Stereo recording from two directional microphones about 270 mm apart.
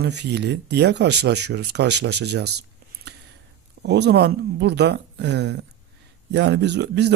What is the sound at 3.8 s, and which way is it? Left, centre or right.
Speech, right.